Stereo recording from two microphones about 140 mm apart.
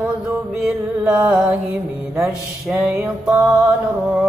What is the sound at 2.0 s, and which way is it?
Mantra, 15° right (ahead or behind).